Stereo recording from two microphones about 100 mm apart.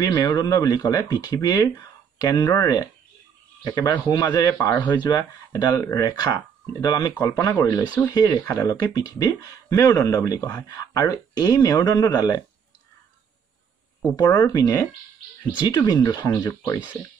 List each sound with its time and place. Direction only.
0.2 s speech: 40° left (ahead or behind)
14.1 s speech: 40° left (ahead or behind)